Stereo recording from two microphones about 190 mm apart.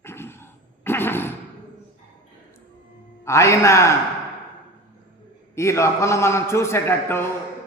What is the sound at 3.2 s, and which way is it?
Speech, 15° left (ahead or behind).